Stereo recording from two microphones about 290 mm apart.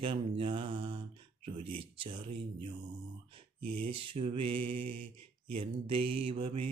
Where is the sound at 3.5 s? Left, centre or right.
Right.